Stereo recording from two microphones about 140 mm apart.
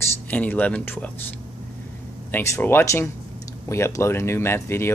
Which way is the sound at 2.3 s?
15° left (ahead or behind).